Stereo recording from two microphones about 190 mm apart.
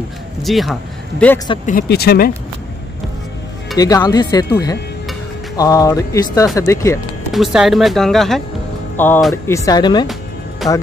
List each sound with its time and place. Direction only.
0.4 s speech: centre (ahead or behind)
1.7 s speech: 50° left (ahead or behind)
3.7 s speech: 20° left (ahead or behind)
7.3 s speech: centre (ahead or behind); by 10.0 s 20° left (ahead or behind)
10.6 s speech: centre (ahead or behind)